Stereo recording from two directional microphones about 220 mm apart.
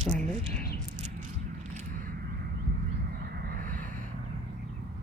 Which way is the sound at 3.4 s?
45° right (ahead or behind).